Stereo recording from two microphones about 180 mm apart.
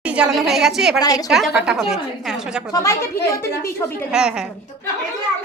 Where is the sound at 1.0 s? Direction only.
20° left (ahead or behind).